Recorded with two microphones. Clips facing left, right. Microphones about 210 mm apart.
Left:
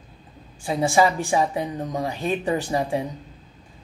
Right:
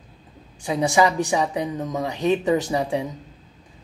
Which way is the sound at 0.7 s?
20° right (ahead or behind).